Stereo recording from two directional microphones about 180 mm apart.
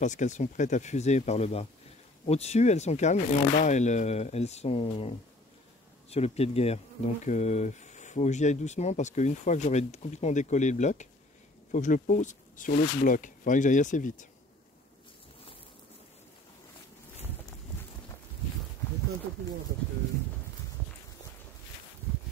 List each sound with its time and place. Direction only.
0.0 s speech: 40° left (ahead or behind)